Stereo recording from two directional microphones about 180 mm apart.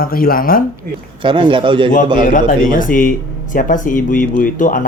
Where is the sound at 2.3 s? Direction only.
50° left (ahead or behind).